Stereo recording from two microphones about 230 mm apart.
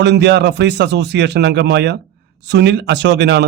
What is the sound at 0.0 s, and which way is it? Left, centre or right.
A man's voice, right.